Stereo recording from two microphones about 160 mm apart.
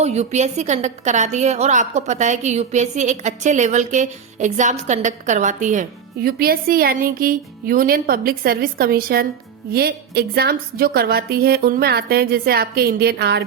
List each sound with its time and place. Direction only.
0.0 s a woman's voice: 45° right (ahead or behind)
6.2 s a woman's voice: 70° right (ahead or behind); by 13.4 s 90° right